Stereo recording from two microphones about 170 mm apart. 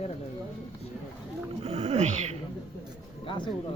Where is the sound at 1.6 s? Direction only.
40° right (ahead or behind).